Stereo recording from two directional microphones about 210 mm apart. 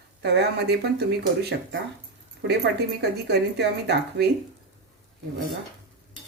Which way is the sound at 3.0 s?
50° right (ahead or behind).